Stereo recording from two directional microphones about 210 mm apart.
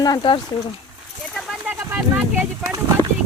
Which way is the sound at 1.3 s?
Centre (ahead or behind).